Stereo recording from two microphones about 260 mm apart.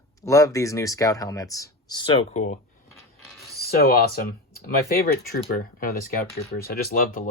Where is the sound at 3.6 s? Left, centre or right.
Left.